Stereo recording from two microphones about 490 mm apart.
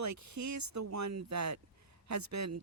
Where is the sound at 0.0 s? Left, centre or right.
Right.